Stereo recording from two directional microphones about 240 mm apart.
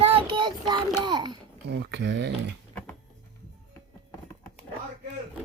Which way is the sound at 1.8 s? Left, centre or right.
Right.